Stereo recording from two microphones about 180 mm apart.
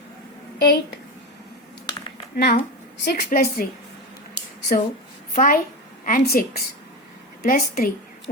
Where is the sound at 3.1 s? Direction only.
55° left (ahead or behind).